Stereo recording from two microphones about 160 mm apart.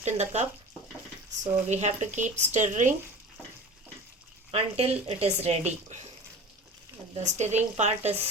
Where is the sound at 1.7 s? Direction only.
45° right (ahead or behind).